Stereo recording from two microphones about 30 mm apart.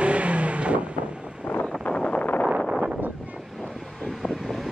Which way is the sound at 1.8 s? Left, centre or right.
Left.